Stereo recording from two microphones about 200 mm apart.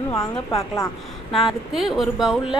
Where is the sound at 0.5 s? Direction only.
15° left (ahead or behind).